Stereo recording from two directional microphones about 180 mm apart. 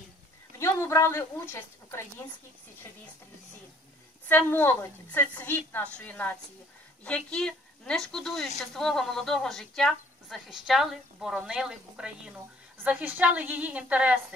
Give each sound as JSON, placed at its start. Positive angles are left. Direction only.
{"t": 0.6, "sound": "a woman's voice", "side_deg": 15}
{"t": 4.3, "sound": "a woman's voice", "side_deg": 10}